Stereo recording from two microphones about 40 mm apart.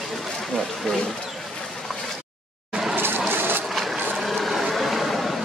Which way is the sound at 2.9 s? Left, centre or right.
Right.